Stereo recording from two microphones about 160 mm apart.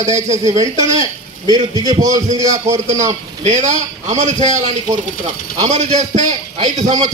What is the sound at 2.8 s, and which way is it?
A man's voice, 50° right (ahead or behind).